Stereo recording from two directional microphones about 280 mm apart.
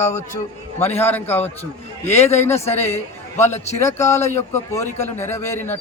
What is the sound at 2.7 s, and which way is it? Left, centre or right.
A woman's voice, left.